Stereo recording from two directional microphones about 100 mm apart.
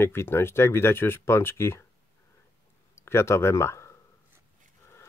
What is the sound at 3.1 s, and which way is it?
Speech, 25° left (ahead or behind).